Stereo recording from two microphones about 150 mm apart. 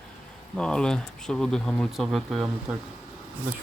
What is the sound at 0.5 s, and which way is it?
Speech, 5° left (ahead or behind).